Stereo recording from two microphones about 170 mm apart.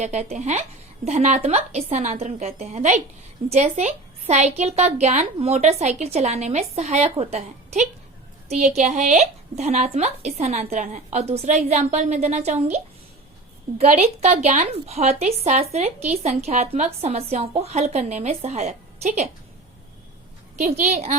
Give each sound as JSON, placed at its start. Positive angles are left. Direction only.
{"t": 0.0, "sound": "a woman's voice", "side_deg": -40}
{"t": 20.6, "sound": "speech", "side_deg": -45}